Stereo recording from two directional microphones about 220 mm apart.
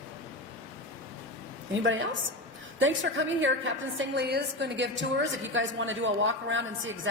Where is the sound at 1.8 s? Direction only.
60° right (ahead or behind).